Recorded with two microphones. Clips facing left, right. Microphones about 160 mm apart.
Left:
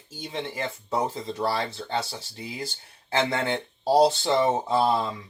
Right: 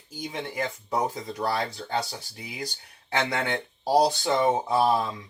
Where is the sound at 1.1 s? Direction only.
25° left (ahead or behind).